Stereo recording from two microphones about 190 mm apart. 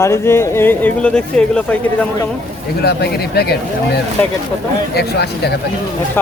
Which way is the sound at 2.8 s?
60° left (ahead or behind).